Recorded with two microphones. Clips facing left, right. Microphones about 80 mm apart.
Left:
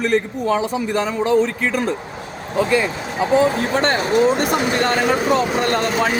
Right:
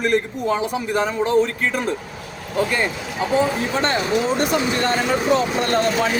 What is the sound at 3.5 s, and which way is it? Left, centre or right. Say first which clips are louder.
A man's voice: left 2 dB; left.